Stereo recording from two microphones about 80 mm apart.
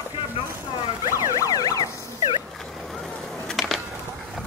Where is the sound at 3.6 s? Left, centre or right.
Centre.